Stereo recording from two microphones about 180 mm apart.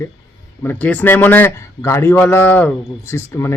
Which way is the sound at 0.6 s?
10° left (ahead or behind).